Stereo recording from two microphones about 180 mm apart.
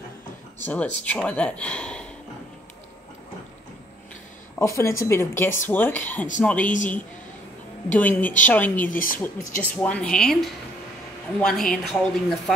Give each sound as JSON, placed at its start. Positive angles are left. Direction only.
{"t": 0.7, "sound": "speech", "side_deg": 10}
{"t": 4.6, "sound": "speech", "side_deg": 15}
{"t": 6.6, "sound": "a woman's voice", "side_deg": 45}
{"t": 7.9, "sound": "speech", "side_deg": 10}
{"t": 8.8, "sound": "a woman's voice", "side_deg": 50}
{"t": 9.6, "sound": "a woman's voice", "side_deg": 10}